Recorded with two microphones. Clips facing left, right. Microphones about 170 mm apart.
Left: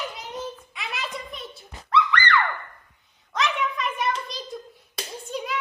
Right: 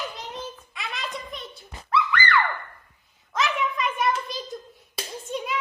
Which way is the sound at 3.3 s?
Centre (ahead or behind).